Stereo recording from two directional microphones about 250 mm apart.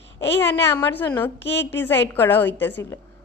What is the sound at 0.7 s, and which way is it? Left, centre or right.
Speech, centre.